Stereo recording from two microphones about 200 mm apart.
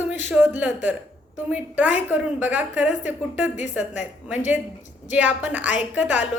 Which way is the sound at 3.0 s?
35° left (ahead or behind).